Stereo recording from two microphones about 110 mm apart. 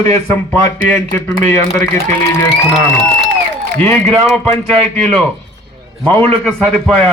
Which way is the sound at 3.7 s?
10° left (ahead or behind).